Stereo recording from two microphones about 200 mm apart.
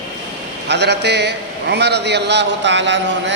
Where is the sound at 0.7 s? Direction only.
60° right (ahead or behind).